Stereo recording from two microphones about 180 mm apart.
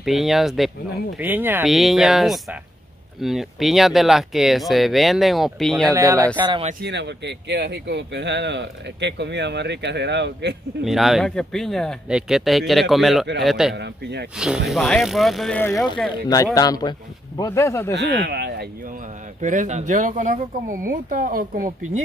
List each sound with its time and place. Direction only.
0.0 s speech: centre (ahead or behind)
5.9 s speech: 20° right (ahead or behind)
6.8 s speech: 70° right (ahead or behind)
10.8 s speech: centre (ahead or behind)
13.7 s speech: 70° right (ahead or behind)
14.7 s speech: centre (ahead or behind)
16.1 s speech: 20° left (ahead or behind)
17.9 s speech: 70° right (ahead or behind)
19.4 s speech: 45° right (ahead or behind)